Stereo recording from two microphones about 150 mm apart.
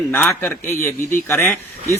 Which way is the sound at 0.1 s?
15° left (ahead or behind).